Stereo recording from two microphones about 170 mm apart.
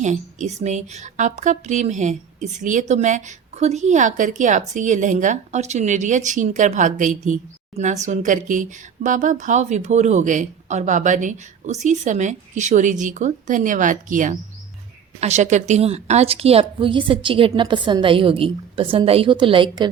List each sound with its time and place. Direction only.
0.0 s a woman's voice: 45° right (ahead or behind); by 19.9 s 25° right (ahead or behind)